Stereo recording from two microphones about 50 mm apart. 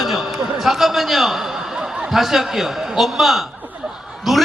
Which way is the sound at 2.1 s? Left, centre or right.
Centre.